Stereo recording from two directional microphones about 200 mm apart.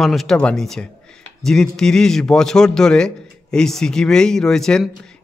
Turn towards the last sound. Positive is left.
turn(degrees=5)  # may be behind; listen again after turning